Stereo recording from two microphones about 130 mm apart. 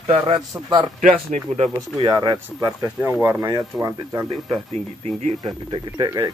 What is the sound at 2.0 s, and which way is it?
A man's voice, 30° right (ahead or behind).